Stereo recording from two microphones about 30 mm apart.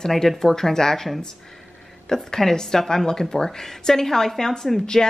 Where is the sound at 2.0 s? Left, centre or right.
Centre.